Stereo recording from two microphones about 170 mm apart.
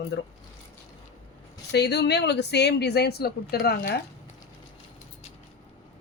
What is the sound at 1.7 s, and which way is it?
Speech, 80° left.